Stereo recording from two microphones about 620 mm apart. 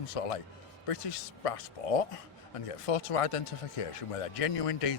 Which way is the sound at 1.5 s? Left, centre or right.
Left.